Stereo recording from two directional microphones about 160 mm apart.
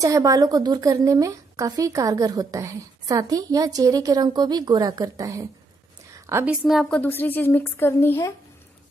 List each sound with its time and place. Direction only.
0.0 s a woman's voice: 20° right (ahead or behind)
6.1 s a sound: 15° right (ahead or behind)
6.6 s a woman's voice: centre (ahead or behind)